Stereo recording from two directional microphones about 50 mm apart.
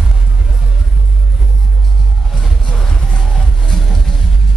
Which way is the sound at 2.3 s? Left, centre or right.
Centre.